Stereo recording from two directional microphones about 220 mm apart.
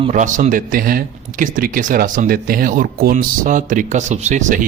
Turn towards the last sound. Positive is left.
turn(degrees=-35)  # may be behind; listen again after turning